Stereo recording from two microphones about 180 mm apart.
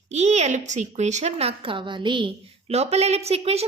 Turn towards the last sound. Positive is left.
turn(degrees=-35)  # may be behind; listen again after turning